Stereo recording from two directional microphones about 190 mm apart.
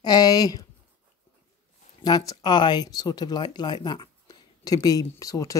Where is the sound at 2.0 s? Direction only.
20° left (ahead or behind).